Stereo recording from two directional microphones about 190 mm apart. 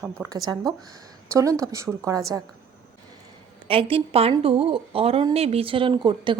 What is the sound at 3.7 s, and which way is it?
A woman's voice, 30° right (ahead or behind).